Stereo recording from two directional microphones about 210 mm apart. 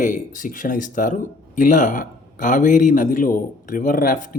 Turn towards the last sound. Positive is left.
turn(degrees=40)  # may be behind; listen again after turning